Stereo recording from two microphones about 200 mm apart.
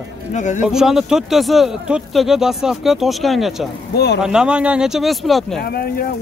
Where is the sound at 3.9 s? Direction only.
55° left (ahead or behind).